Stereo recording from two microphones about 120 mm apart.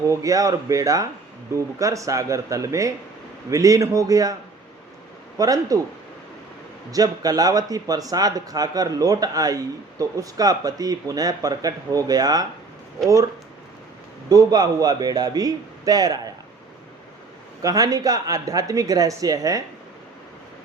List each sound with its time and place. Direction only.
0.1 s a woman's voice: 30° right (ahead or behind)
5.4 s a woman's voice: 30° right (ahead or behind)
6.9 s speech: 30° right (ahead or behind)
14.3 s speech: 30° right (ahead or behind)
17.6 s a woman's voice: 30° right (ahead or behind)